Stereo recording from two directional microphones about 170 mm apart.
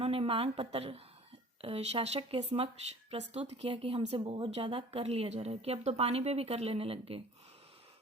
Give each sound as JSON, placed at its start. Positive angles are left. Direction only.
{"t": 0.0, "sound": "a woman's voice", "side_deg": -35}